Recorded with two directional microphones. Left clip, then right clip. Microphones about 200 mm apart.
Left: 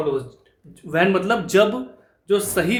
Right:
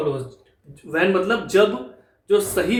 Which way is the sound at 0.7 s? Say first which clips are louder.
Left 1 dB; 40° left (ahead or behind).